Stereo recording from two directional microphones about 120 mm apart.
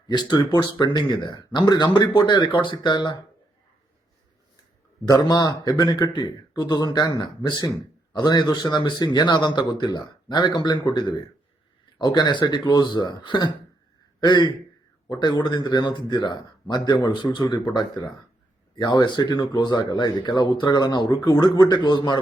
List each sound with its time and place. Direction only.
0.1 s speech: 35° left (ahead or behind)
5.0 s a man's voice: 35° left (ahead or behind)